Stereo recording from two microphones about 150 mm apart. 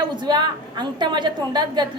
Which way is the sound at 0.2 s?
30° right (ahead or behind).